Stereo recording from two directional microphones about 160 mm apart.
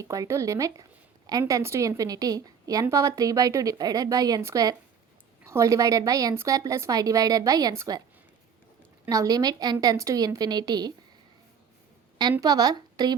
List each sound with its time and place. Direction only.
0.0 s a woman's voice: 20° right (ahead or behind)
9.0 s a woman's voice: 25° right (ahead or behind)
12.4 s a woman's voice: 25° right (ahead or behind)